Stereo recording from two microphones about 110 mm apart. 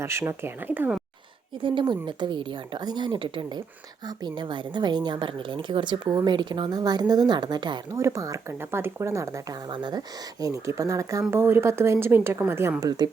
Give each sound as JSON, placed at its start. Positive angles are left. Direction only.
{"t": 0.0, "sound": "speech", "side_deg": -25}
{"t": 1.6, "sound": "a woman's voice", "side_deg": -45}
{"t": 7.9, "sound": "speech", "side_deg": -25}
{"t": 9.6, "sound": "a woman's voice", "side_deg": -45}
{"t": 10.4, "sound": "speech", "side_deg": -30}